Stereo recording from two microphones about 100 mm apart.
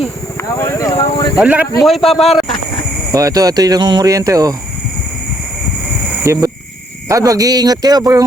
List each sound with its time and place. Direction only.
0.5 s speech: 30° left (ahead or behind)
1.4 s a man's voice: 15° right (ahead or behind)
1.8 s a man's voice: centre (ahead or behind)
3.1 s speech: 35° right (ahead or behind)
6.2 s speech: 35° right (ahead or behind)